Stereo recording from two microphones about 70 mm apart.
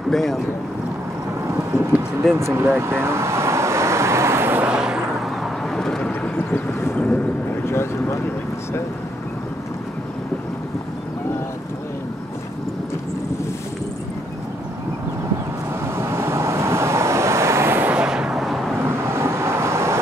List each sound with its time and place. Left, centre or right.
0.1 s speech: centre
2.3 s vehicle: right
4.6 s vehicle: centre
5.8 s vehicle: centre
6.3 s vehicle: left
16.0 s vehicle: right
17.9 s artillery fire: centre
18.9 s vehicle: right